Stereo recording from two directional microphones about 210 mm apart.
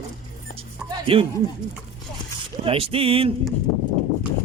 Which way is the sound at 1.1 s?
25° right (ahead or behind).